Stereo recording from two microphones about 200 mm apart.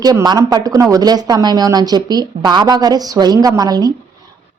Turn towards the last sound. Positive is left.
turn(degrees=-20)  # may be behind; listen again after turning